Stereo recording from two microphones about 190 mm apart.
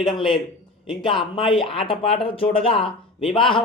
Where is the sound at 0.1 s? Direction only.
25° left (ahead or behind).